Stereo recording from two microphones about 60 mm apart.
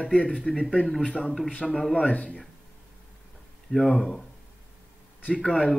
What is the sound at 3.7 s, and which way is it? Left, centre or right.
Speech, centre.